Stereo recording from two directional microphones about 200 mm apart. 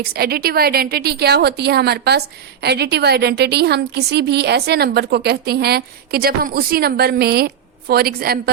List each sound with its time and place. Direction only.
0.1 s a woman's voice: 50° right (ahead or behind)